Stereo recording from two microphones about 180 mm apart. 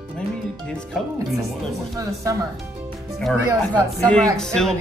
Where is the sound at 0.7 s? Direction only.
Centre (ahead or behind).